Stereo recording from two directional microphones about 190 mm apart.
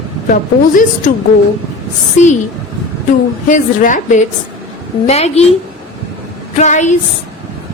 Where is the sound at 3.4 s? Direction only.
40° left (ahead or behind).